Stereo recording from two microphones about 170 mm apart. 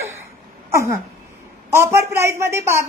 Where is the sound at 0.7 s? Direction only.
15° right (ahead or behind).